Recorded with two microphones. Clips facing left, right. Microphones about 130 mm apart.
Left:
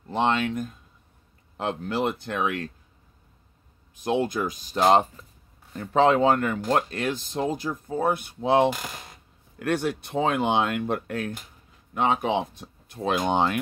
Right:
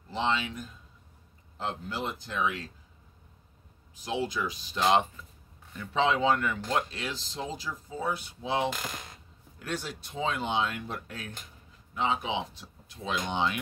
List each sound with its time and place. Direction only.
0.1 s speech: 55° left (ahead or behind)
1.6 s speech: 70° left (ahead or behind)
3.9 s speech: 55° left (ahead or behind)